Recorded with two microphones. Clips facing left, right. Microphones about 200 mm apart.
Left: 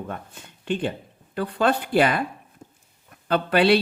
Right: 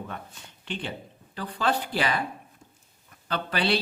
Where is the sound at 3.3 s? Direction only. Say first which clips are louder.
Left 9 dB; 55° left (ahead or behind).